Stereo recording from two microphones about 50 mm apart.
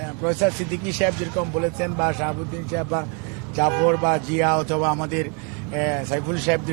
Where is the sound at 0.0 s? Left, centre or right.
Centre.